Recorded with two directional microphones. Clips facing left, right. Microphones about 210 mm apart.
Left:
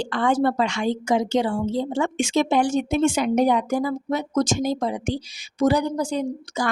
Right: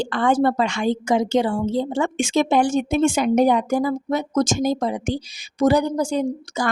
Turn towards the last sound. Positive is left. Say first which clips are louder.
# right 3 dB
turn(degrees=-45)  # may be behind; listen again after turning